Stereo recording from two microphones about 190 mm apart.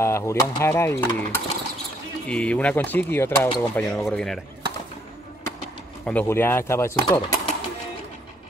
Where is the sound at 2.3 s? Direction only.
5° left (ahead or behind).